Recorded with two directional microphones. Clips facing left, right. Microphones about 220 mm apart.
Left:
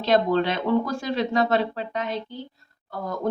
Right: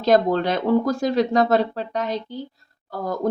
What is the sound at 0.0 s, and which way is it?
Speech, 45° right (ahead or behind).